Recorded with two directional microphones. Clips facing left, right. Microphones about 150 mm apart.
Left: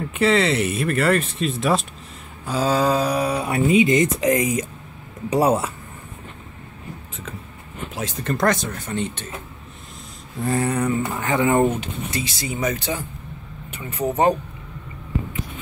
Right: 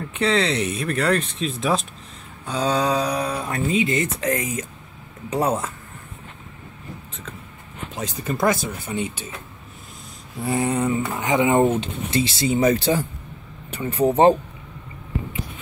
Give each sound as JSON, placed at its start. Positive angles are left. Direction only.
{"t": 0.0, "sound": "speech", "side_deg": 5}
{"t": 7.9, "sound": "speech", "side_deg": 0}
{"t": 10.4, "sound": "a sound", "side_deg": -15}
{"t": 11.7, "sound": "speech", "side_deg": -25}